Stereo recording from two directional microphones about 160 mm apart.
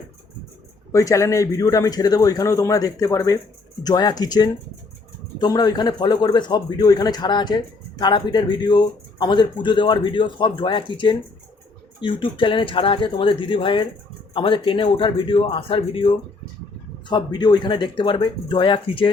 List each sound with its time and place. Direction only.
0.9 s a man's voice: 20° left (ahead or behind)